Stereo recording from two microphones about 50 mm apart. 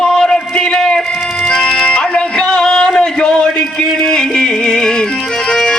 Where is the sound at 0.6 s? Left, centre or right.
Centre.